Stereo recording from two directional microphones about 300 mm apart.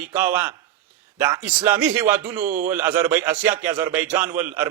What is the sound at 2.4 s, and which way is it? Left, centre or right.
Speech, right.